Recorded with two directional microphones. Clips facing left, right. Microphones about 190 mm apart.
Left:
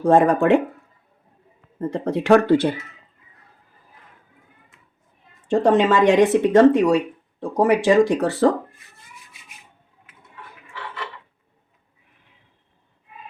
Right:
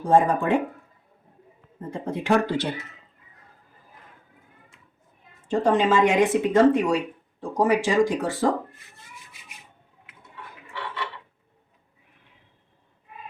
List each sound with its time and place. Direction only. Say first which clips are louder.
0.0 s speech: left 5 dB; 80° left
1.9 s speech: left 7 dB; 85° left; by 2.6 s 65° left (ahead or behind)
5.5 s speech: left 4 dB; 70° left (ahead or behind)